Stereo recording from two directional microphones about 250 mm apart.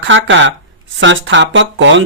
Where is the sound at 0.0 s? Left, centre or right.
Right.